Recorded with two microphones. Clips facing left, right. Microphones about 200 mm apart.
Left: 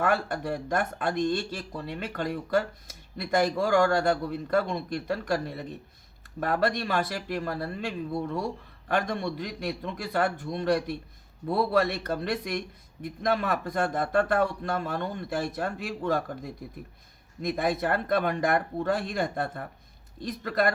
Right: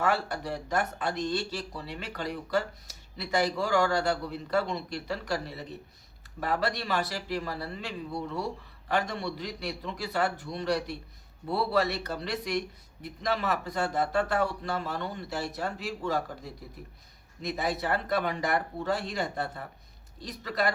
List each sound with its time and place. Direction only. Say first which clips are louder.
0.0 s speech: left 2 dB; 50° left (ahead or behind)